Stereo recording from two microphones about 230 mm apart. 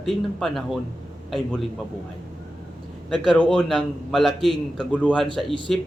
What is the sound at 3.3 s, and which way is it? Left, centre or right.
A man's voice, centre.